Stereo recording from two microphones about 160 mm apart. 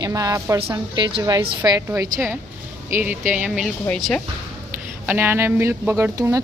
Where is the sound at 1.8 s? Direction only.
15° right (ahead or behind); by 4.2 s 5° left (ahead or behind).